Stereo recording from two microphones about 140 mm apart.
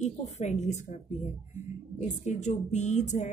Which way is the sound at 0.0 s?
55° left (ahead or behind).